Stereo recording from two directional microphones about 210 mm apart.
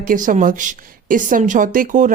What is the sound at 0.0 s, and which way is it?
A woman's voice, 40° right (ahead or behind).